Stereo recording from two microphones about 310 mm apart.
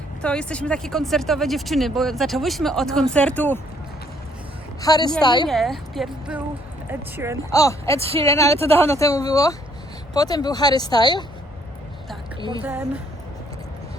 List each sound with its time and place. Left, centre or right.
0.2 s speech: centre
4.8 s speech: centre
5.5 s speech: centre
7.5 s speech: centre
12.6 s speech: centre